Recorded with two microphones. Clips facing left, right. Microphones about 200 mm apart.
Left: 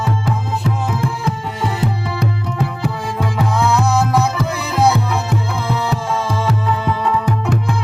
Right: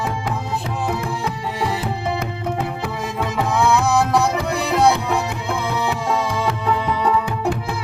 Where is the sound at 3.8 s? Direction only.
Centre (ahead or behind).